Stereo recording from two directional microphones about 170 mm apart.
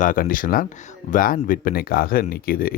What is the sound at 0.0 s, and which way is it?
Speech, 55° left (ahead or behind).